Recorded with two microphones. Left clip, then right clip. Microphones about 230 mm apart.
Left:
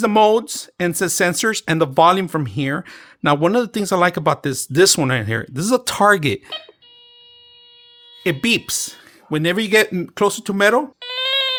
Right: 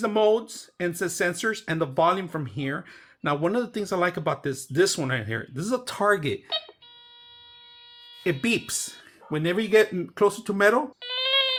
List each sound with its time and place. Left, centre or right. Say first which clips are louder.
0.0 s speech: left 8 dB; left
8.2 s speech: left 7 dB; left